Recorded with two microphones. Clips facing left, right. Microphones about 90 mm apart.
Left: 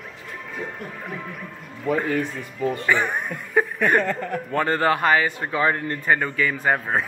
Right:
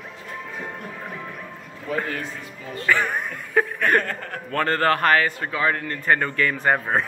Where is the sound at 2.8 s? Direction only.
5° left (ahead or behind).